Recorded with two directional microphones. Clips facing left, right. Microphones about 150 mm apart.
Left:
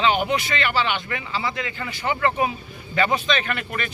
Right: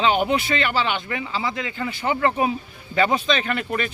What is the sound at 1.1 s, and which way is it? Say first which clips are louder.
Speech: right 1 dB; 25° right (ahead or behind).